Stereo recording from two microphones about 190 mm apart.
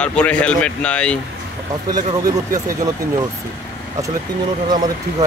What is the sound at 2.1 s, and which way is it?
Speech, 20° right (ahead or behind).